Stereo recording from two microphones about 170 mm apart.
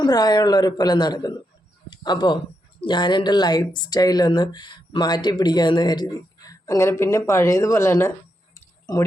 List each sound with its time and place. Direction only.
0.0 s speech: 25° left (ahead or behind)